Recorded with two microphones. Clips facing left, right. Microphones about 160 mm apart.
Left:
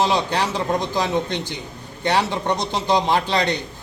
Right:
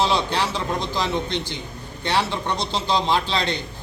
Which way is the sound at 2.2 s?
15° left (ahead or behind).